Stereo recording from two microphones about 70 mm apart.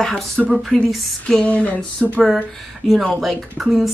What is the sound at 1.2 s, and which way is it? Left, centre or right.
Speech, centre.